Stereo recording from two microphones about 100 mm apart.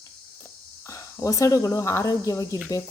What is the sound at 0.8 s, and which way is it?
Speech, 30° left (ahead or behind).